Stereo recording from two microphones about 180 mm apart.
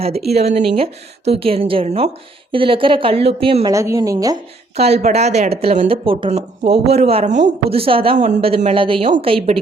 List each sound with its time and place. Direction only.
0.0 s a woman's voice: 35° right (ahead or behind)
3.7 s a woman's voice: 15° right (ahead or behind)
4.8 s speech: 35° right (ahead or behind)